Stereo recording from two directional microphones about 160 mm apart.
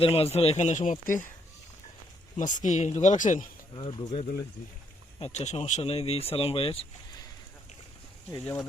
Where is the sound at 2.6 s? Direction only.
45° left (ahead or behind).